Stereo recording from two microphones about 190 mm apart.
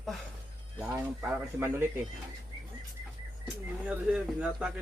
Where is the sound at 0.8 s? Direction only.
15° right (ahead or behind).